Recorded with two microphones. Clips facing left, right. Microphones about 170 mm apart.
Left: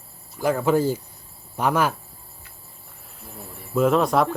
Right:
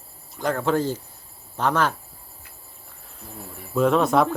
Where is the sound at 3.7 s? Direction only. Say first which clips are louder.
Even; centre (ahead or behind).